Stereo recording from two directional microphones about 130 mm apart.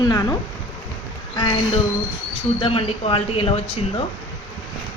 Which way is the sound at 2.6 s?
45° left (ahead or behind).